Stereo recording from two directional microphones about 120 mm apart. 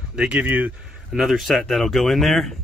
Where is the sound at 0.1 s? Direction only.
10° right (ahead or behind).